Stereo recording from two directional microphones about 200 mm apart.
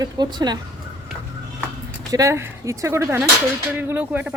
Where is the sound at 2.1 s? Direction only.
15° right (ahead or behind).